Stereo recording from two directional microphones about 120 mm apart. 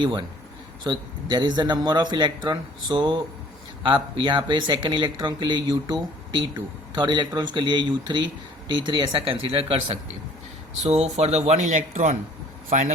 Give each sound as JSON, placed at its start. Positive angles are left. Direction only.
{"t": 0.0, "sound": "speech", "side_deg": -40}
{"t": 11.2, "sound": "speech", "side_deg": -60}